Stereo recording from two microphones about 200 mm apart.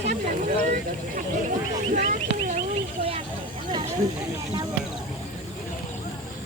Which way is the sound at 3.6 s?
25° right (ahead or behind).